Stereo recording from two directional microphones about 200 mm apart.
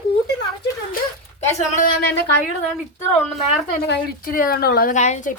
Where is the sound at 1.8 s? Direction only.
55° left (ahead or behind).